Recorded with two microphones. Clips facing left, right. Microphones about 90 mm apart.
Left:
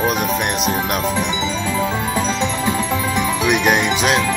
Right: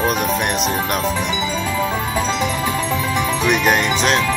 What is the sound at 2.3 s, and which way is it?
Music, 20° left (ahead or behind).